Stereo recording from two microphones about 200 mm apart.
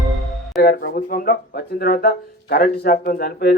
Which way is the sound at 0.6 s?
50° left (ahead or behind).